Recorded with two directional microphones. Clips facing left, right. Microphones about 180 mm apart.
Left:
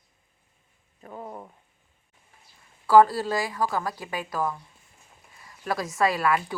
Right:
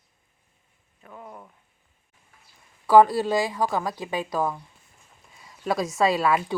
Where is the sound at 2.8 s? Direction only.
15° right (ahead or behind).